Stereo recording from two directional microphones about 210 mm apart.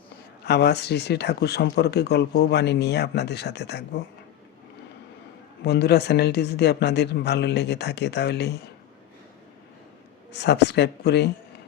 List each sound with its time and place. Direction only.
0.4 s speech: 50° left (ahead or behind)
5.6 s speech: 50° left (ahead or behind)
10.3 s speech: 55° left (ahead or behind)